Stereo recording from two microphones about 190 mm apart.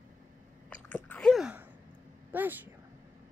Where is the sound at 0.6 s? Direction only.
5° left (ahead or behind).